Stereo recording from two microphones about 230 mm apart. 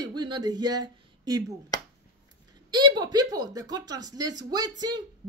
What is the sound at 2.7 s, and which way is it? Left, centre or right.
Speech, centre.